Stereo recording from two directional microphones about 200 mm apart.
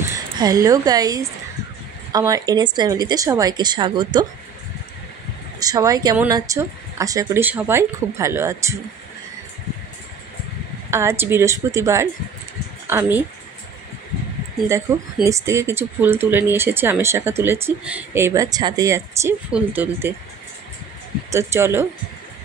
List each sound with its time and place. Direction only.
0.0 s a woman's voice: 15° right (ahead or behind)
5.6 s speech: 20° right (ahead or behind)
10.9 s speech: 15° right (ahead or behind)
15.2 s speech: 15° right (ahead or behind)
21.3 s speech: 15° right (ahead or behind)